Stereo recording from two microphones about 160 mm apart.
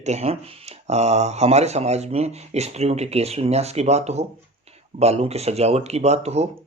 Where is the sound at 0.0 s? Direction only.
45° right (ahead or behind).